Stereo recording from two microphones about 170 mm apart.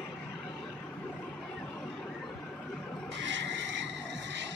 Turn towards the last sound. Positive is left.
turn(degrees=-90)